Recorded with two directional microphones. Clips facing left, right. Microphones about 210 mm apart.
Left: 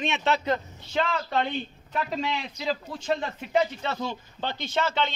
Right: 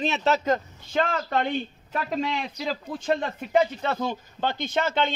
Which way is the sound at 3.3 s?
50° right (ahead or behind).